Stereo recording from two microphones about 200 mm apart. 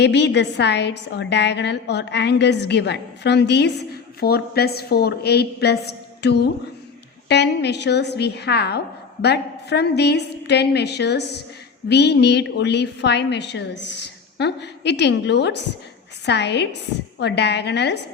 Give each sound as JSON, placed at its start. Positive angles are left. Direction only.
{"t": 0.0, "sound": "a woman's voice", "side_deg": 60}